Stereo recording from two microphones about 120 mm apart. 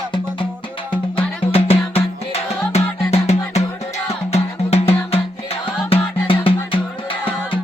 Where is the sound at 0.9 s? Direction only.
50° left (ahead or behind).